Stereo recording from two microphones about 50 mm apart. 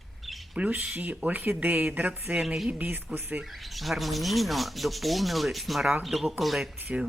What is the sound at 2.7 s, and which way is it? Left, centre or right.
Speech, right.